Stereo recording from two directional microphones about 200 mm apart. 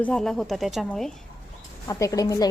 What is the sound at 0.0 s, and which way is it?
Speech, 5° left (ahead or behind).